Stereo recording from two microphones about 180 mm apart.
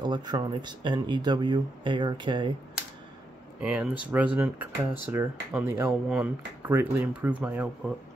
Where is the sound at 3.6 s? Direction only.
5° right (ahead or behind).